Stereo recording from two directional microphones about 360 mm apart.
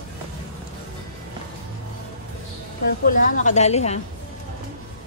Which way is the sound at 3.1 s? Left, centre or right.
Left.